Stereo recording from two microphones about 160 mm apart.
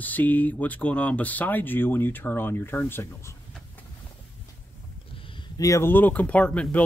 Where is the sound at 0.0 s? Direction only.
10° left (ahead or behind).